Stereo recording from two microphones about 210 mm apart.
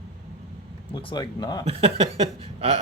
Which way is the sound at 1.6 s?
30° right (ahead or behind).